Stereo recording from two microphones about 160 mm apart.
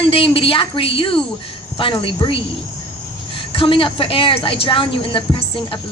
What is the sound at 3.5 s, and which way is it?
A woman's voice, 35° left (ahead or behind).